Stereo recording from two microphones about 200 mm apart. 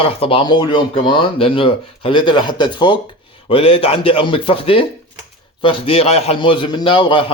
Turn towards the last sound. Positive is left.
turn(degrees=25)  # may be behind; listen again after turning